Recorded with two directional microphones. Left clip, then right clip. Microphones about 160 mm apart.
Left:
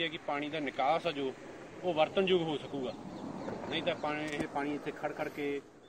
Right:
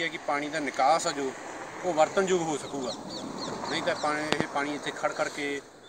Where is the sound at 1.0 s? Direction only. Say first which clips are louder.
Right 5 dB; 30° right (ahead or behind).